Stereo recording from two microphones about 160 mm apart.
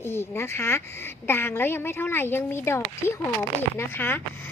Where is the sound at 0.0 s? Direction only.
15° left (ahead or behind).